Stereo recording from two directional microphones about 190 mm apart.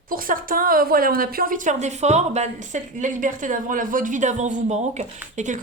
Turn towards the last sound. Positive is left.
turn(degrees=-40)  # may be behind; listen again after turning